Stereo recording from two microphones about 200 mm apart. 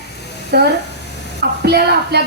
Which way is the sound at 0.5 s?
55° right (ahead or behind).